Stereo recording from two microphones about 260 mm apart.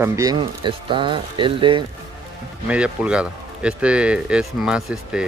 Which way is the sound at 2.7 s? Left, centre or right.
Centre.